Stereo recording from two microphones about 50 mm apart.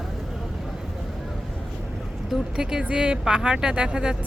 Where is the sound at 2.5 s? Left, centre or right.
Centre.